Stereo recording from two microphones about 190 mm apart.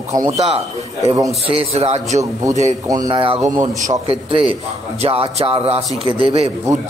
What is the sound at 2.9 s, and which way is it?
Speech, 20° right (ahead or behind).